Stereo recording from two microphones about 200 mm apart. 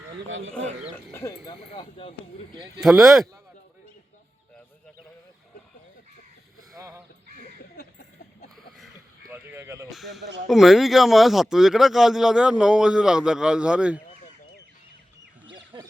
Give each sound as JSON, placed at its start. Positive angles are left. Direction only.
{"t": 0.3, "sound": "speech", "side_deg": -75}
{"t": 1.5, "sound": "speech", "side_deg": 25}
{"t": 2.8, "sound": "speech", "side_deg": 0}
{"t": 6.7, "sound": "speech", "side_deg": -15}
{"t": 9.3, "sound": "speech", "side_deg": -10}
{"t": 9.9, "sound": "speech", "side_deg": 0}
{"t": 15.5, "sound": "duck", "side_deg": -20}